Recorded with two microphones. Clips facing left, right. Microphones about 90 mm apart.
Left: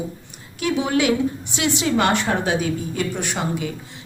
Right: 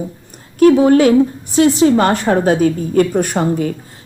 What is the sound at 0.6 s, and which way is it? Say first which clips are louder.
A woman's voice: right 12 dB; 40° right (ahead or behind).